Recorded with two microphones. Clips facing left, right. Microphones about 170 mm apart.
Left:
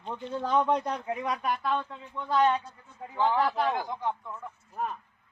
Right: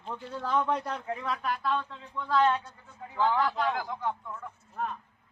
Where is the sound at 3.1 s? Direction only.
25° left (ahead or behind).